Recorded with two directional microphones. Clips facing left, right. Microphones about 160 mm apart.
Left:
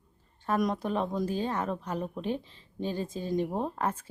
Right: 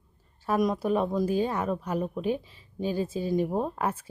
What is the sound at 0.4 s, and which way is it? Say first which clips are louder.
Speech: right 3 dB; 5° right (ahead or behind).